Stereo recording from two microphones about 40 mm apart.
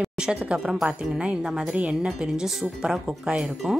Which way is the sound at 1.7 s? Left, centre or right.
Right.